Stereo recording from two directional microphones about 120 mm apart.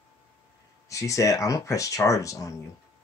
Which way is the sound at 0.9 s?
25° left (ahead or behind).